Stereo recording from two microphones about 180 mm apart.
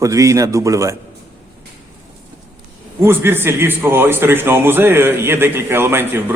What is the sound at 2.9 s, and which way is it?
A man's voice, 15° right (ahead or behind).